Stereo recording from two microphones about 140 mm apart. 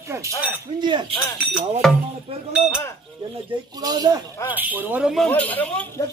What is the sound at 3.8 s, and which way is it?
Speech, 25° right (ahead or behind).